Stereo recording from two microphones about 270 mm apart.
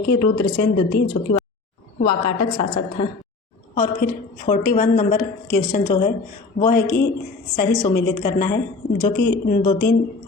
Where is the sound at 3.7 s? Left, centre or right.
Left.